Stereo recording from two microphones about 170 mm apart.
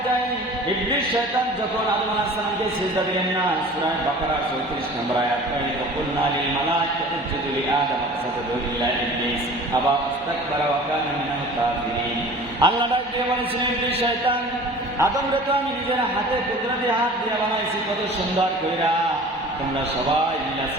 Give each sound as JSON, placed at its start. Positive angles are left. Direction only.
{"t": 12.5, "sound": "a man's voice", "side_deg": -25}